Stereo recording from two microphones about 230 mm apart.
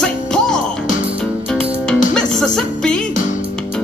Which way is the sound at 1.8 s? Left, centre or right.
Centre.